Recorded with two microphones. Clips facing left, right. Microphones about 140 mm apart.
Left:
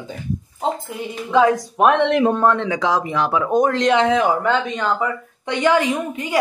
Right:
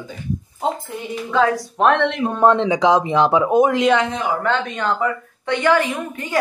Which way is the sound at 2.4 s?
20° right (ahead or behind).